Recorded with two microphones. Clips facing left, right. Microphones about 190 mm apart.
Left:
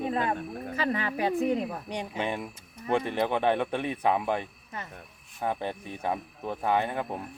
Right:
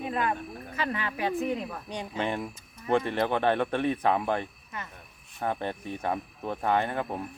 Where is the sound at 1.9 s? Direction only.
15° left (ahead or behind).